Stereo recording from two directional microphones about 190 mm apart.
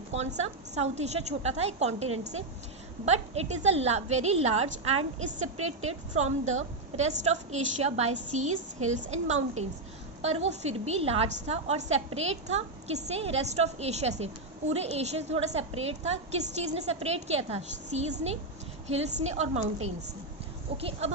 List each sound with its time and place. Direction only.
0.1 s a woman's voice: 35° right (ahead or behind)
3.1 s a woman's voice: 35° right (ahead or behind)